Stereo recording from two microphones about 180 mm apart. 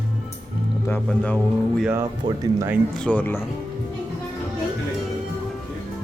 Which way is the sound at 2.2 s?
25° right (ahead or behind).